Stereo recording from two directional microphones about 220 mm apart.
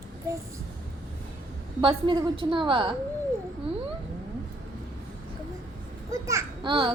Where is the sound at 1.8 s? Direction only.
25° right (ahead or behind).